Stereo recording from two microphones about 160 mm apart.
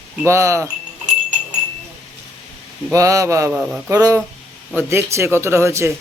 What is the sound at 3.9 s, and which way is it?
Speech, 20° right (ahead or behind).